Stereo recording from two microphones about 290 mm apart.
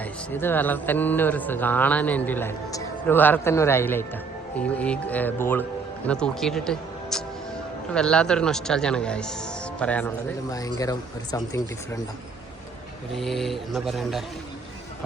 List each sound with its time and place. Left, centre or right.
0.0 s speech: centre
13.1 s speech: centre